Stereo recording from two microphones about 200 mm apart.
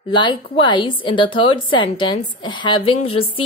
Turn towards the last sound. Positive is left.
turn(degrees=30)  # may be behind; listen again after turning